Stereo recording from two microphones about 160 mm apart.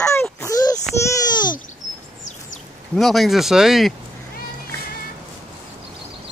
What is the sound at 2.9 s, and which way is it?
Speech, centre (ahead or behind).